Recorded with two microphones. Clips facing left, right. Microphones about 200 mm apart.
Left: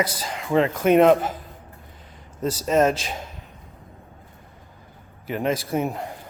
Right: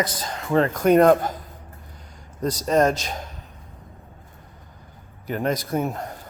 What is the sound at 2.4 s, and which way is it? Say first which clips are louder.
Speech: even; 5° left (ahead or behind).